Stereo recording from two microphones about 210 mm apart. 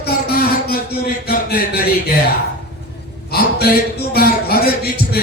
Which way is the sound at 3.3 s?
50° left (ahead or behind).